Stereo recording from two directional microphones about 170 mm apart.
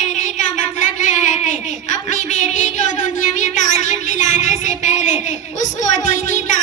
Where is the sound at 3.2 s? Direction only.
45° left (ahead or behind).